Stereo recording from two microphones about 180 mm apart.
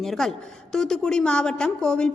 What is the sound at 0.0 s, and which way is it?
A woman's voice, centre (ahead or behind).